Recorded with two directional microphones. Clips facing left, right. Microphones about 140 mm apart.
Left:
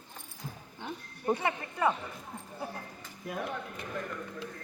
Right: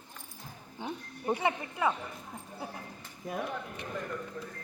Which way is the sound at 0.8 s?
5° right (ahead or behind).